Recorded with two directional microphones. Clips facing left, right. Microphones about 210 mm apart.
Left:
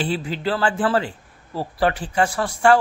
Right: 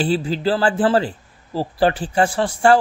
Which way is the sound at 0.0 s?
35° right (ahead or behind).